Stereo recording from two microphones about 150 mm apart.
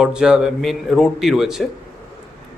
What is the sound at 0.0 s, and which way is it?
Speech, 5° right (ahead or behind).